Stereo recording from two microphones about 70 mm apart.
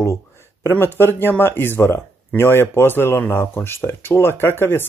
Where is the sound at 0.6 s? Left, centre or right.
Left.